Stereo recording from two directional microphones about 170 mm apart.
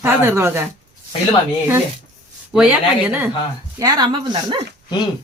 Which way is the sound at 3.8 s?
25° right (ahead or behind).